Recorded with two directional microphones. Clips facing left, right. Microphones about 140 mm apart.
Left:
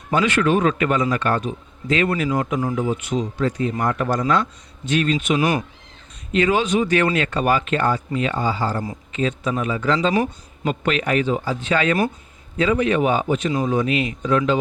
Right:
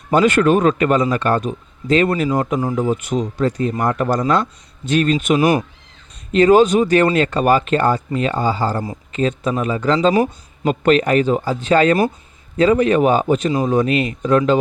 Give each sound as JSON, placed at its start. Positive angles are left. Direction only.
{"t": 0.1, "sound": "speech", "side_deg": -45}
{"t": 2.8, "sound": "speech", "side_deg": -45}